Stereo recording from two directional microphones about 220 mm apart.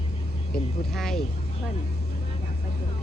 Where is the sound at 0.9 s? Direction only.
Centre (ahead or behind).